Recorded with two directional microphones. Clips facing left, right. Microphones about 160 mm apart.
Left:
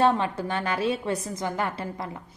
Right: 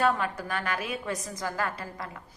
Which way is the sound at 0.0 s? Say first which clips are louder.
Left 4 dB; 25° left (ahead or behind).